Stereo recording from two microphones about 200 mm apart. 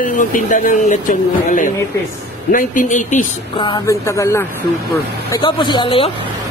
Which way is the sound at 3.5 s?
25° left (ahead or behind).